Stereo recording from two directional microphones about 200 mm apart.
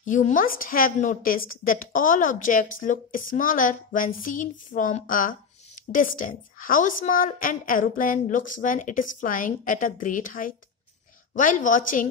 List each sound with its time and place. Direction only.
0.0 s a woman's voice: 40° left (ahead or behind)